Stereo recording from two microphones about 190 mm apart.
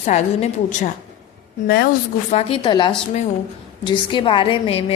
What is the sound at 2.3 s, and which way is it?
A woman's voice, 30° left (ahead or behind).